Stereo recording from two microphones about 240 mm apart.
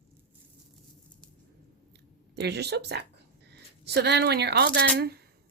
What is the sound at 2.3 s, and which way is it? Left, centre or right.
Speech, right.